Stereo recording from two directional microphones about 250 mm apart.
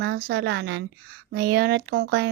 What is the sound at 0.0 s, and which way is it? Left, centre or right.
Speech, right.